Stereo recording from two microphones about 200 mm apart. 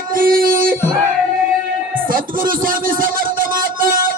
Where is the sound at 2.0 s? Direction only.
45° right (ahead or behind).